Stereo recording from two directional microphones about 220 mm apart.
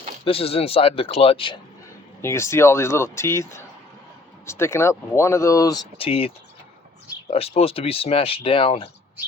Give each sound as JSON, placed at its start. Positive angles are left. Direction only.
{"t": 0.3, "sound": "speech", "side_deg": 25}
{"t": 2.2, "sound": "speech", "side_deg": 10}